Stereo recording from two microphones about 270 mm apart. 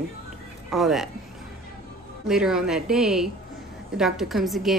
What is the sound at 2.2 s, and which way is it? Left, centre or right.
A woman's voice, centre.